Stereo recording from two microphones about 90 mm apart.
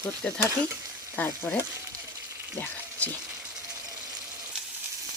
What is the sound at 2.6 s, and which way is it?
Ratchet, 20° left (ahead or behind).